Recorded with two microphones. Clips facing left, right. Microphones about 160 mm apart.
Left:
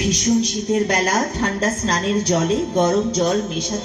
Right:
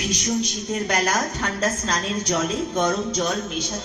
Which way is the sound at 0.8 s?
30° left (ahead or behind).